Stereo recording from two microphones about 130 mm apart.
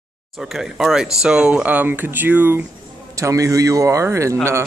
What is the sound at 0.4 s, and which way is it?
Speech, 5° right (ahead or behind).